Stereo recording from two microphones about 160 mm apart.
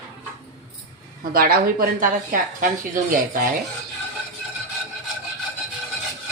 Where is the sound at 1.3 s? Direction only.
65° right (ahead or behind).